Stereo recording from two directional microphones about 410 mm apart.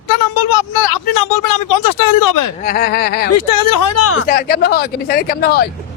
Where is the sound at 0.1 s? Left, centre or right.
Left.